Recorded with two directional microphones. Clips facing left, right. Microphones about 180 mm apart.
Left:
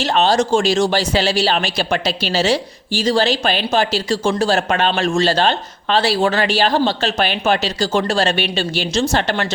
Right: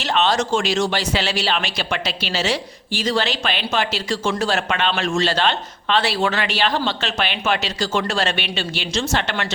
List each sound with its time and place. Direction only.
0.0 s speech: 40° left (ahead or behind)